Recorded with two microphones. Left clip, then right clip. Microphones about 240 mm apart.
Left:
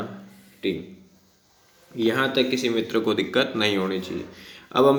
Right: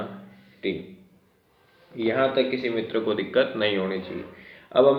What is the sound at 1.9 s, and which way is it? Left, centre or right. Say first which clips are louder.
Speech: even; left.